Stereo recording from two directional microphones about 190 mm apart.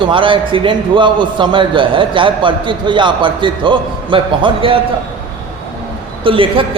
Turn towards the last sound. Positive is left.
turn(degrees=-30)  # may be behind; listen again after turning